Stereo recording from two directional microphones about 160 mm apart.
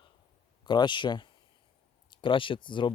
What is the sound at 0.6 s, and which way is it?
Speech, 30° left (ahead or behind).